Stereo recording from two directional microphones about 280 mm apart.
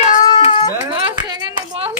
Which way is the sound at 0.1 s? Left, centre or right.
Left.